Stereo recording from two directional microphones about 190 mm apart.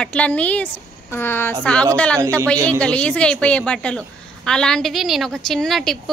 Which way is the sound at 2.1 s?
15° right (ahead or behind).